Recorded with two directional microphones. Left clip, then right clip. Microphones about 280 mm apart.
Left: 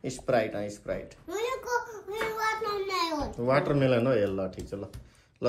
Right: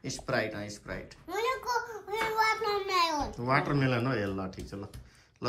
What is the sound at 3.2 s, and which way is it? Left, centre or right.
Speech, centre.